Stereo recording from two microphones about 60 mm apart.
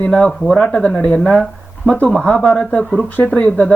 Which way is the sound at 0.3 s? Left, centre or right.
Centre.